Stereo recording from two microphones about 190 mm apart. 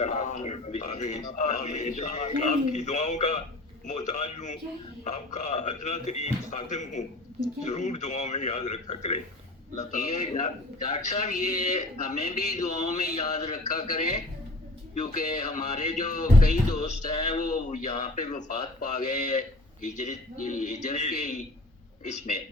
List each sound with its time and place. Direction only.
0.0 s speech: 40° left (ahead or behind)